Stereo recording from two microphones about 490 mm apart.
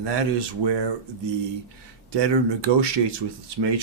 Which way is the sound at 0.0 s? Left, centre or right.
Right.